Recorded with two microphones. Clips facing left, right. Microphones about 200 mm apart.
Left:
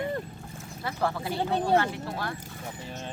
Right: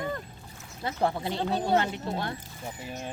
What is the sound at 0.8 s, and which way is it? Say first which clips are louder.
Speech: right 2 dB; 25° right (ahead or behind).